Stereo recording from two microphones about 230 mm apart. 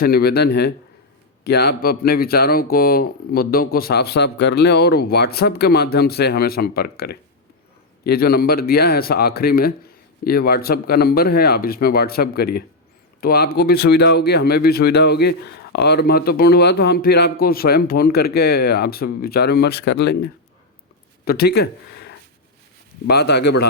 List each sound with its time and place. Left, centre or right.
0.0 s speech: left